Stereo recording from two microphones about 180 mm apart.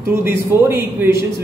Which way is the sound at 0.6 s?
15° right (ahead or behind).